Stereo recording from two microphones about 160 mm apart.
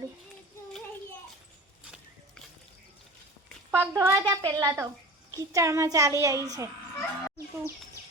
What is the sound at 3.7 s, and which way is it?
A child's voice, 15° right (ahead or behind).